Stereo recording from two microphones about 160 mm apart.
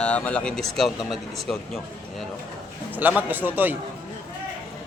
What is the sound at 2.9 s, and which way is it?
Speech, 10° right (ahead or behind).